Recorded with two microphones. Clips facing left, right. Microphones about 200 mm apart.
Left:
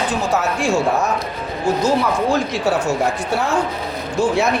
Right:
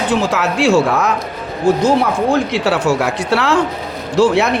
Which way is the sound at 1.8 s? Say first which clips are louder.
Right 3 dB; 55° right (ahead or behind).